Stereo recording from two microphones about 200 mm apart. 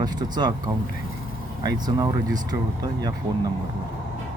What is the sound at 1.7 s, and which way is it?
Speech, 20° right (ahead or behind).